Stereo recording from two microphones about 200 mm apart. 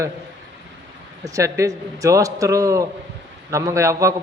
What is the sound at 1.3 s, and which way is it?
A man's voice, 15° right (ahead or behind).